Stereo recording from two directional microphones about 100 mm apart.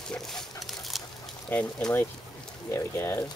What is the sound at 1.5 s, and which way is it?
Speech, 20° left (ahead or behind).